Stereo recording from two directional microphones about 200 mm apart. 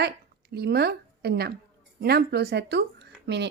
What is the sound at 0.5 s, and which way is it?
A woman's voice, 55° right (ahead or behind).